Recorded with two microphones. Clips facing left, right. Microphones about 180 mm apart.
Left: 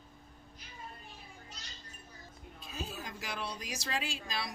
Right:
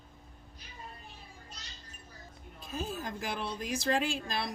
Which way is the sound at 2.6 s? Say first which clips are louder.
Right 5 dB; 50° right (ahead or behind).